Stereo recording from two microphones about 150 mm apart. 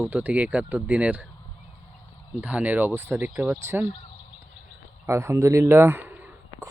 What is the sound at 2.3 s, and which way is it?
Speech, 10° right (ahead or behind).